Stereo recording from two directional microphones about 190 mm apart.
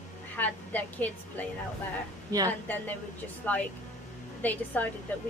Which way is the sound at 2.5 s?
10° left (ahead or behind).